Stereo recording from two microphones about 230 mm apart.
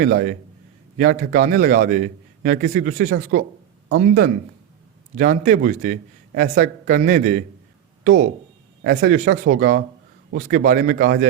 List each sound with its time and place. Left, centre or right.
0.0 s a man's voice: right